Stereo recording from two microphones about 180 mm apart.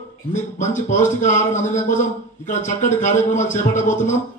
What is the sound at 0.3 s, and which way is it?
Speech, 40° left (ahead or behind).